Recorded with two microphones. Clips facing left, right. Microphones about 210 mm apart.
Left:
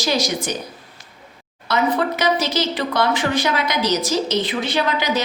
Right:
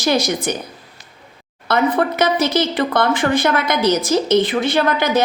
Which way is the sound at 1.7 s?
55° right (ahead or behind).